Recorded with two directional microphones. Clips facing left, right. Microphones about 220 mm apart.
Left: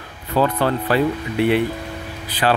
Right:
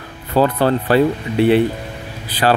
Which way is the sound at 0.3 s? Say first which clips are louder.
Right 4 dB; 35° right (ahead or behind).